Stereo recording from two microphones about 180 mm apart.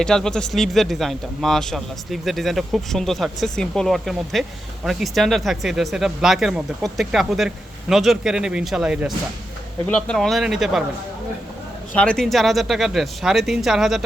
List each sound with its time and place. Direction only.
0.0 s speech: 5° left (ahead or behind)
9.8 s speech: 5° left (ahead or behind)
11.9 s speech: 5° left (ahead or behind)